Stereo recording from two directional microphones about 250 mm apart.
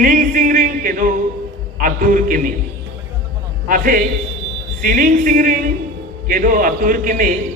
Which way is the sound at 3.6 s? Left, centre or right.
Right.